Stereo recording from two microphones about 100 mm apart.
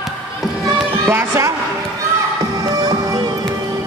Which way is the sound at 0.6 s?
40° right (ahead or behind).